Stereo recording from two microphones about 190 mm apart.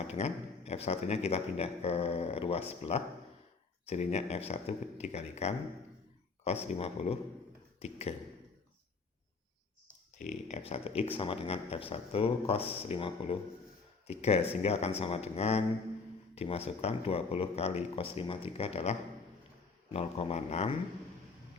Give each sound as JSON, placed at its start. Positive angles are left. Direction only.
{"t": 0.1, "sound": "speech", "side_deg": 35}
{"t": 7.8, "sound": "a sound", "side_deg": 35}
{"t": 10.2, "sound": "speech", "side_deg": 35}